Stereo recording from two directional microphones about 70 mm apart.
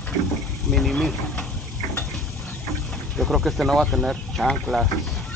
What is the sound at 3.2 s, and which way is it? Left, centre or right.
Speech, centre.